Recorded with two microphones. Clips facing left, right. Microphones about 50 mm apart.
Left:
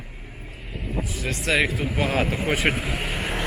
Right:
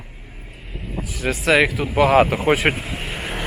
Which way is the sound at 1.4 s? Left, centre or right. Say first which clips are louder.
Right 6 dB; right.